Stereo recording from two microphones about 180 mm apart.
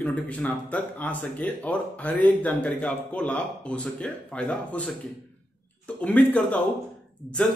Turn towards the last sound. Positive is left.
turn(degrees=5)  # may be behind; listen again after turning